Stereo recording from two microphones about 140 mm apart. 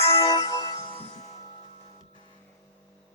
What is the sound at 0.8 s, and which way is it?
Music, 40° left (ahead or behind).